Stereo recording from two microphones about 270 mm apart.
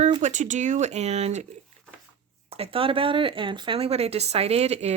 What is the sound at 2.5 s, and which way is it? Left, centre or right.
Speech, right.